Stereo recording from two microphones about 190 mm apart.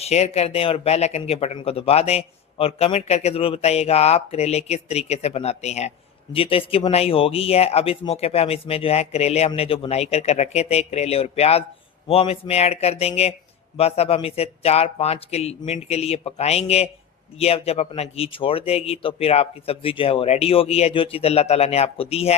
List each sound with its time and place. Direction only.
0.0 s speech: 35° left (ahead or behind)